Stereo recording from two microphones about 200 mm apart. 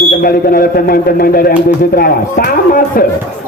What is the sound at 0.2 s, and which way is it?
A man's voice, 45° left (ahead or behind).